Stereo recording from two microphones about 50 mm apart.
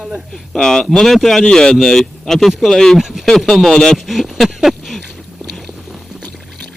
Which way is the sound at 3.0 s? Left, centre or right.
Centre.